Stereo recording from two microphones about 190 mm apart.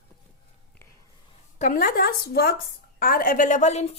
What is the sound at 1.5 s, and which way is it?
A woman's voice, 45° left (ahead or behind).